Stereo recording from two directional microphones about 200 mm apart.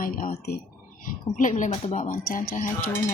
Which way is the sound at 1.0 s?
40° left (ahead or behind).